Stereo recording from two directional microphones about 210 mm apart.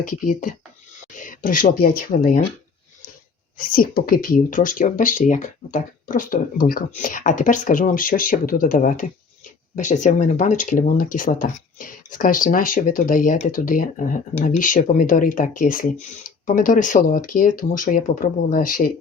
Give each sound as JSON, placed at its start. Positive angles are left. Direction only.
{"t": 0.3, "sound": "speech", "side_deg": 40}
{"t": 3.6, "sound": "speech", "side_deg": 40}